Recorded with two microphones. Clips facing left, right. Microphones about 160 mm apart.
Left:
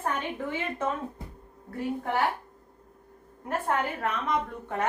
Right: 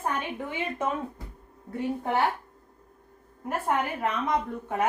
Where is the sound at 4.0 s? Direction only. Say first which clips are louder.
Right 2 dB; 10° right (ahead or behind).